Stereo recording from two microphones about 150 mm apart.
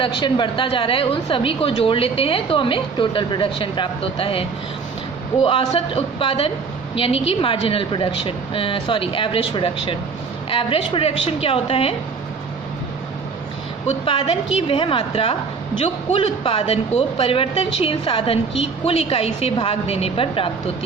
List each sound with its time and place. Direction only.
0.0 s speech: 35° left (ahead or behind)
13.8 s speech: 40° left (ahead or behind)